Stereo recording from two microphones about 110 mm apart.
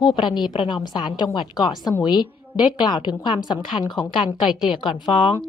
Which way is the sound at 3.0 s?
45° left (ahead or behind).